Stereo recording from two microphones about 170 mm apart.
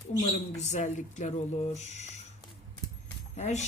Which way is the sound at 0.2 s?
45° left (ahead or behind).